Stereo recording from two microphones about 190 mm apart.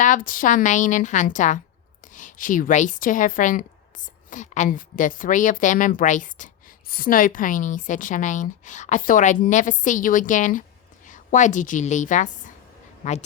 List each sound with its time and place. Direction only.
0.0 s a woman's voice: 45° left (ahead or behind)